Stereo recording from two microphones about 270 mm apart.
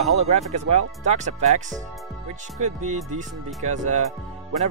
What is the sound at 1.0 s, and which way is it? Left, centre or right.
Speech, right.